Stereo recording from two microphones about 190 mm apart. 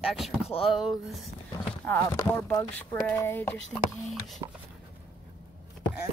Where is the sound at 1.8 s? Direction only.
10° left (ahead or behind).